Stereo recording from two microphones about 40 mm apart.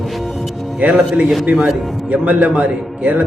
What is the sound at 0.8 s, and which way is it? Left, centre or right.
A man's voice, right.